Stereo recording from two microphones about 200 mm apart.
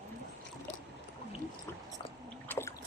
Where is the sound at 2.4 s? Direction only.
10° left (ahead or behind).